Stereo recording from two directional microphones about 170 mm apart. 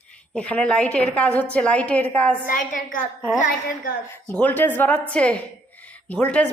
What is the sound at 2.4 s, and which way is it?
Speech, 50° left (ahead or behind).